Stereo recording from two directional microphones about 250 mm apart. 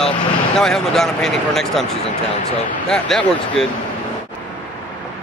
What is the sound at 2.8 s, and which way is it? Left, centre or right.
Speech, centre.